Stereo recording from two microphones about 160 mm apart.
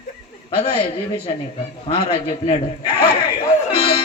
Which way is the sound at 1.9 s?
35° left (ahead or behind).